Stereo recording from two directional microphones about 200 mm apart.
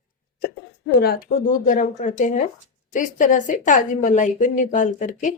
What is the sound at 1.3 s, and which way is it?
A woman's voice, 40° left (ahead or behind).